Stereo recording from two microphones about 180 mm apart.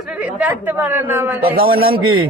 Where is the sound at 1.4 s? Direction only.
55° right (ahead or behind).